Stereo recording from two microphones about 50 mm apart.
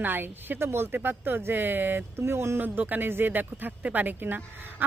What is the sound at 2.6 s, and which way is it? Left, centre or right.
Speech, right.